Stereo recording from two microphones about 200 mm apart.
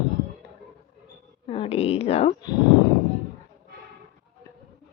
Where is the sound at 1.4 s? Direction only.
30° left (ahead or behind).